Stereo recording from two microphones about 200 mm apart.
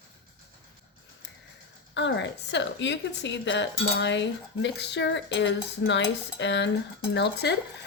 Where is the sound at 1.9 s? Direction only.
60° left (ahead or behind).